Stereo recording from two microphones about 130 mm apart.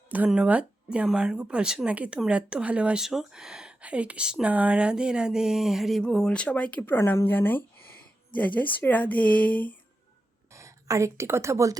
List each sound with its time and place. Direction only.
0.3 s speech: 10° right (ahead or behind); by 9.7 s 10° left (ahead or behind)
10.5 s a woman's voice: 25° right (ahead or behind)